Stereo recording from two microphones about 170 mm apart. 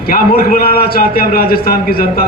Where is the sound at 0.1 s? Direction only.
60° left (ahead or behind).